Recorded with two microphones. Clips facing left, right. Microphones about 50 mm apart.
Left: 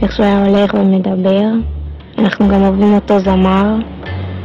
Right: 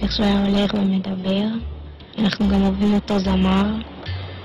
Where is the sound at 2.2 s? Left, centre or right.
Left.